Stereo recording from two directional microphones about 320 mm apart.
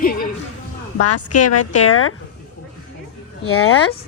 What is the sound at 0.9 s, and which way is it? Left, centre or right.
Speech, left.